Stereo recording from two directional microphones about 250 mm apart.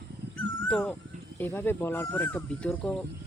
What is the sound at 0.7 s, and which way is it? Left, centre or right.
Speech, centre.